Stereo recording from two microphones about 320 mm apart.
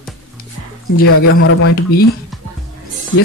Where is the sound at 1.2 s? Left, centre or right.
Left.